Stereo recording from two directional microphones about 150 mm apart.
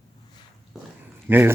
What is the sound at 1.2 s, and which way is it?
Speech, 15° right (ahead or behind).